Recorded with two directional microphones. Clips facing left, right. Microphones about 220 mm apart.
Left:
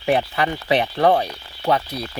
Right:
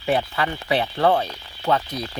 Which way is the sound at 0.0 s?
20° left (ahead or behind).